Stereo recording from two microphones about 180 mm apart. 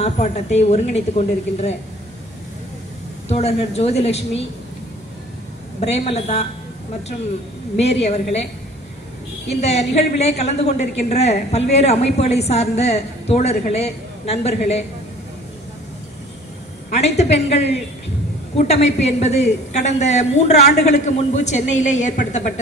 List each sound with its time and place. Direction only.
0.0 s a woman's voice: 40° left (ahead or behind)
3.3 s a woman's voice: 35° left (ahead or behind)
5.8 s a woman's voice: 35° left (ahead or behind)
7.8 s a woman's voice: 35° left (ahead or behind)
9.5 s a woman's voice: 35° left (ahead or behind)
16.9 s a woman's voice: 35° left (ahead or behind)